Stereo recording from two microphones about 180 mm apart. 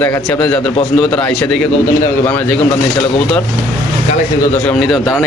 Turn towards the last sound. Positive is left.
turn(degrees=0)  # may be behind; listen again after turning